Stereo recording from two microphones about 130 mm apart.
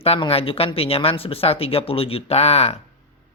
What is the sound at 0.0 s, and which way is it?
Speech, 50° left (ahead or behind).